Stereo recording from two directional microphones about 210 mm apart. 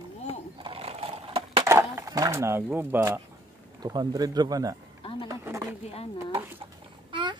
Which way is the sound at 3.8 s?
20° right (ahead or behind).